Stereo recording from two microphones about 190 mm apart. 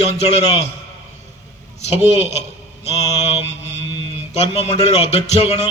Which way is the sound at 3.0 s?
35° left (ahead or behind).